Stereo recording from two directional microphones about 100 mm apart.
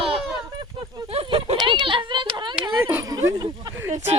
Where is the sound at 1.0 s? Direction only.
65° right (ahead or behind).